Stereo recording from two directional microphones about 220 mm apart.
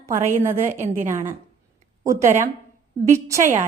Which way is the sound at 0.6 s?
35° right (ahead or behind).